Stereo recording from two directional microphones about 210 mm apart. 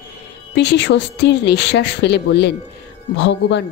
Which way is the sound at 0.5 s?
55° left (ahead or behind).